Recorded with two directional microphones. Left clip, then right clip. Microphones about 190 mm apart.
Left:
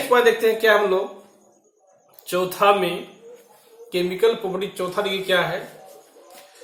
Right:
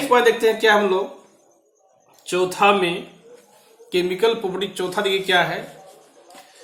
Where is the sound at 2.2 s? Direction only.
50° right (ahead or behind).